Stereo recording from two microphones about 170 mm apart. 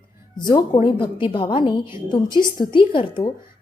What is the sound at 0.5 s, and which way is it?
A woman's voice, 25° left (ahead or behind).